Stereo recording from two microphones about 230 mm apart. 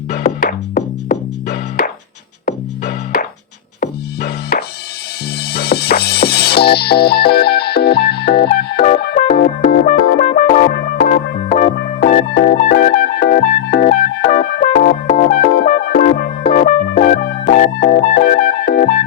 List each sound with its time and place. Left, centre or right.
0.1 s music: left